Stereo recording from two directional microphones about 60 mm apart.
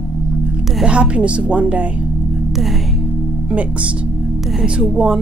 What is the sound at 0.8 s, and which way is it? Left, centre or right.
A woman's voice, centre.